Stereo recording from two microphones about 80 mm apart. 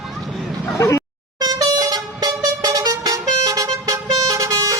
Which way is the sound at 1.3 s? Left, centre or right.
Right.